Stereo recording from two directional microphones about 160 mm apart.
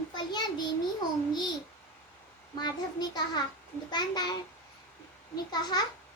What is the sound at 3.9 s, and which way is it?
A child's voice, 25° left (ahead or behind).